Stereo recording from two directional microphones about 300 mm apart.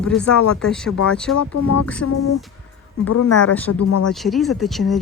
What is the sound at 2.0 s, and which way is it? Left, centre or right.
Speech, left.